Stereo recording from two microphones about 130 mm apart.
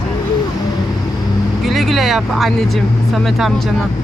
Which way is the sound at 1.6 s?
Centre (ahead or behind).